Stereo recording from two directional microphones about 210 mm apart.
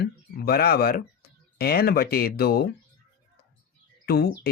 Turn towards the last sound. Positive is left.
turn(degrees=50)  # may be behind; listen again after turning